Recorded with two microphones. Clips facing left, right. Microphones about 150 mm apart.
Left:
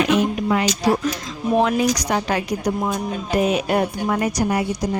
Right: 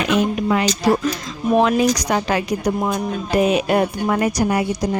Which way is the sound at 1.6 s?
90° right.